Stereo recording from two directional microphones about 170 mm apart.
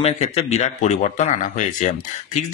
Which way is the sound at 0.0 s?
40° left (ahead or behind).